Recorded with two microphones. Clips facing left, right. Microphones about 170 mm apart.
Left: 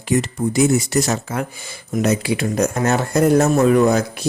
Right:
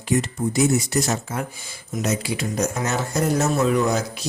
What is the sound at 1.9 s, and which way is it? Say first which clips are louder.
Speech: left 6 dB; 60° left (ahead or behind).